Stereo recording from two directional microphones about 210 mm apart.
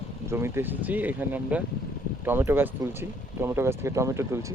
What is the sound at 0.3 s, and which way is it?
Speech, 10° right (ahead or behind).